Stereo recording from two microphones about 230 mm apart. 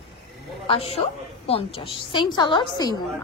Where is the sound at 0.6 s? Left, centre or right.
Left.